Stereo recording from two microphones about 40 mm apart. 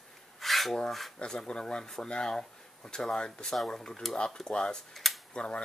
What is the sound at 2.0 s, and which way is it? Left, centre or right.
Speech, centre.